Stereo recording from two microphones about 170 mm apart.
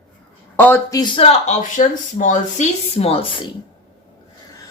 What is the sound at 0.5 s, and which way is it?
A man's voice, 10° left (ahead or behind).